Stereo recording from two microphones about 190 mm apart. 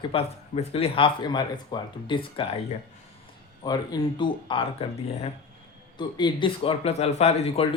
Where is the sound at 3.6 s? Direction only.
20° left (ahead or behind).